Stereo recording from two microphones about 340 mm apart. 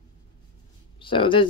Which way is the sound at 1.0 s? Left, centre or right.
Centre.